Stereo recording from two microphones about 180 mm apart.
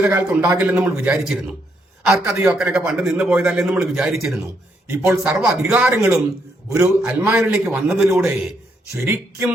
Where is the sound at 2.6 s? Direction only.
5° right (ahead or behind).